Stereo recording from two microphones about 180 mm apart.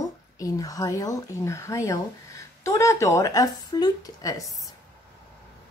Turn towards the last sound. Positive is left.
turn(degrees=20)  # may be behind; listen again after turning